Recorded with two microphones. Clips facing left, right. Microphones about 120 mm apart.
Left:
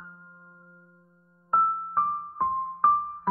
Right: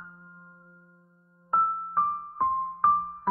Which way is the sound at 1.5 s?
Centre (ahead or behind).